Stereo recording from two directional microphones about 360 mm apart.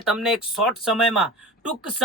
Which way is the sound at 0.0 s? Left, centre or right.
Centre.